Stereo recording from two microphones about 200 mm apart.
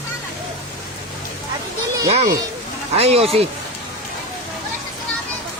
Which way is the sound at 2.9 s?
30° right (ahead or behind).